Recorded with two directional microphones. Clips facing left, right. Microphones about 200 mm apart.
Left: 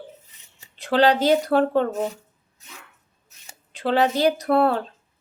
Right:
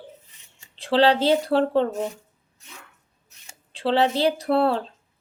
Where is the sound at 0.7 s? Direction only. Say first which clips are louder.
Even; 30° right (ahead or behind).